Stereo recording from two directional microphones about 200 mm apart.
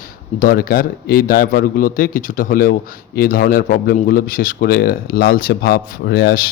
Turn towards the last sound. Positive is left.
turn(degrees=55)  # may be behind; listen again after turning